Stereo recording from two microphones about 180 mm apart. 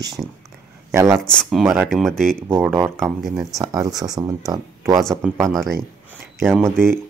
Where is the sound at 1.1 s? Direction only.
5° left (ahead or behind).